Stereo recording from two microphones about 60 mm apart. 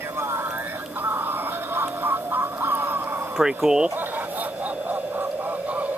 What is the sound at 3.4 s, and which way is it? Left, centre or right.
Speech, centre.